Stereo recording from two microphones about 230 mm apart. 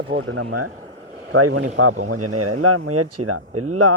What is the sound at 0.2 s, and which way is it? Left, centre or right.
Speech, right.